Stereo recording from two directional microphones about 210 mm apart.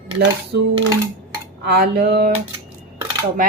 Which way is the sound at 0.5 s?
50° right (ahead or behind).